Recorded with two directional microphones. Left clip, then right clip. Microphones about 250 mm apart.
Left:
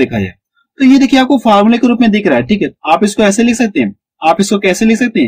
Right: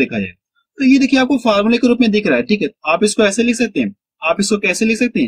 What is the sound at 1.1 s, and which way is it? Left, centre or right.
Speech, centre.